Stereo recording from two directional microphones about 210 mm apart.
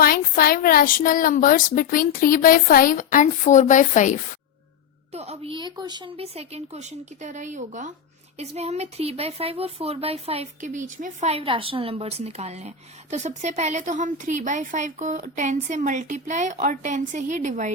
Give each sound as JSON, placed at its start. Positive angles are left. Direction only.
{"t": 0.0, "sound": "speech", "side_deg": 45}
{"t": 5.1, "sound": "a woman's voice", "side_deg": -30}